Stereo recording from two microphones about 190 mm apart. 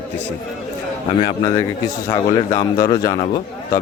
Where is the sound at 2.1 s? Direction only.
20° left (ahead or behind).